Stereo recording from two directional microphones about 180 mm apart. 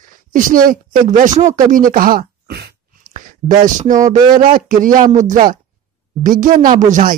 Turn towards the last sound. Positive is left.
turn(degrees=-45)  # may be behind; listen again after turning